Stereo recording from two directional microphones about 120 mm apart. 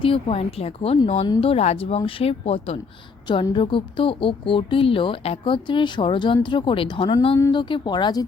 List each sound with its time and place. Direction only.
0.0 s speech: 50° left (ahead or behind)
3.5 s speech: 45° left (ahead or behind)